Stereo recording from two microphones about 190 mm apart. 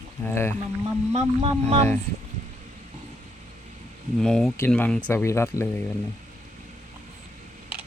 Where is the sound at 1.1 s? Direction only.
35° right (ahead or behind).